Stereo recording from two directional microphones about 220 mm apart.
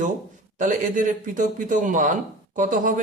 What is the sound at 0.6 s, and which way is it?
Speech, 35° right (ahead or behind).